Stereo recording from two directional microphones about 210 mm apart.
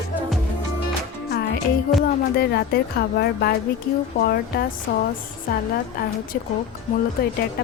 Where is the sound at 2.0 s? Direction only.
50° left (ahead or behind).